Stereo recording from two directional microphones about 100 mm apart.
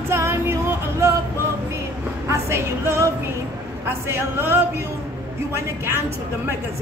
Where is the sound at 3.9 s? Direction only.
25° right (ahead or behind).